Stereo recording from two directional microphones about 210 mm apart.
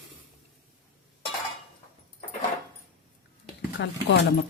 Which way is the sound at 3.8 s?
60° left (ahead or behind).